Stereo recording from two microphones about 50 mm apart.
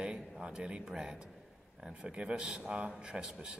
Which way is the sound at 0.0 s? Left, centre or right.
Centre.